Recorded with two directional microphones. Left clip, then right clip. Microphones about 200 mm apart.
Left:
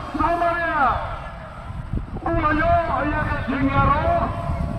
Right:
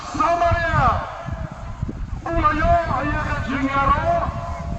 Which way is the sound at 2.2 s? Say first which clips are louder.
Right 1 dB; 15° right (ahead or behind).